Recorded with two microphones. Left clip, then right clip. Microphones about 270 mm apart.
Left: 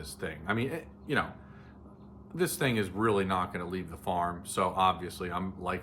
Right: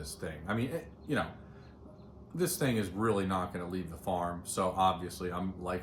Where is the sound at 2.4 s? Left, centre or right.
Centre.